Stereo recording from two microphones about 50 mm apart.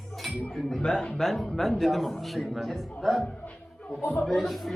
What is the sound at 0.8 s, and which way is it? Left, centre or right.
Speech, centre.